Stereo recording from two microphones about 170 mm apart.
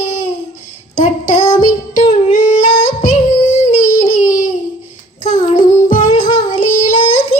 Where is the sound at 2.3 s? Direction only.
45° left (ahead or behind).